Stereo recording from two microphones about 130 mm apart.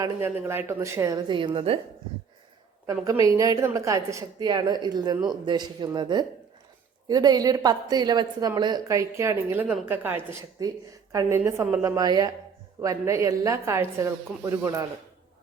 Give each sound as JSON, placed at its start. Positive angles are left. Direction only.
{"t": 0.0, "sound": "a woman's voice", "side_deg": -20}
{"t": 1.3, "sound": "speech", "side_deg": -40}
{"t": 2.8, "sound": "a woman's voice", "side_deg": -25}
{"t": 10.6, "sound": "a woman's voice", "side_deg": -30}